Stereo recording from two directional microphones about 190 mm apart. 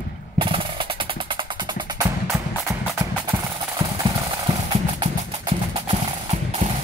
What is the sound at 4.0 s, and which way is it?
Music, 25° right (ahead or behind).